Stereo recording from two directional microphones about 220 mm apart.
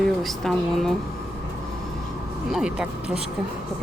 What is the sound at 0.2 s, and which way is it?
Speech, centre (ahead or behind).